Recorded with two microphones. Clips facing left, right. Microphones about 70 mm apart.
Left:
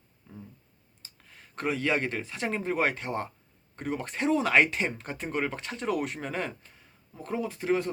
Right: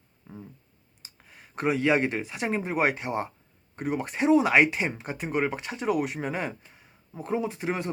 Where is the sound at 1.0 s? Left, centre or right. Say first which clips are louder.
Right 2 dB; centre.